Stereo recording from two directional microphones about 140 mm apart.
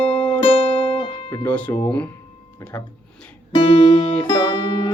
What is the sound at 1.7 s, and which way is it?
Speech, 25° left (ahead or behind).